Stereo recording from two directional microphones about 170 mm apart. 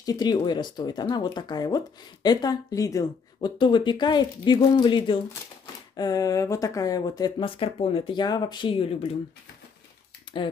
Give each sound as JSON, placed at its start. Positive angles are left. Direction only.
{"t": 0.0, "sound": "speech", "side_deg": 20}